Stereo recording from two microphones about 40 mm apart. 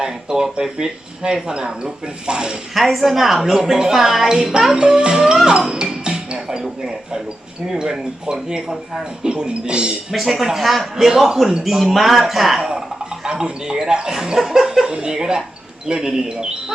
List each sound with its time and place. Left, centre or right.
0.0 s speech: centre
2.7 s a woman's voice: centre
4.7 s music: centre
8.3 s a woman's voice: centre
10.1 s speech: centre
10.9 s a woman's voice: centre
14.8 s speech: centre